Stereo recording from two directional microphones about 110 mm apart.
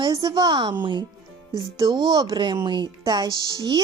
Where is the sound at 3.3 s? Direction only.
35° left (ahead or behind).